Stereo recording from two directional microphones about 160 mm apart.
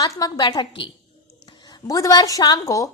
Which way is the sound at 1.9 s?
20° left (ahead or behind).